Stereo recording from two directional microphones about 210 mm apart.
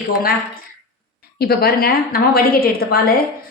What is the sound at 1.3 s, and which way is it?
A woman's voice, 50° left (ahead or behind).